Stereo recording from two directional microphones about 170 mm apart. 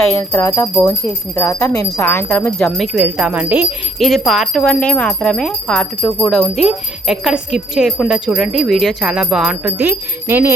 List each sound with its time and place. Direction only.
0.2 s speech: 15° left (ahead or behind)
2.6 s speech: centre (ahead or behind)
3.9 s speech: centre (ahead or behind)